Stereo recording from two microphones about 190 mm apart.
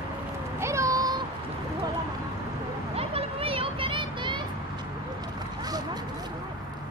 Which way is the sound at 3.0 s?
30° right (ahead or behind).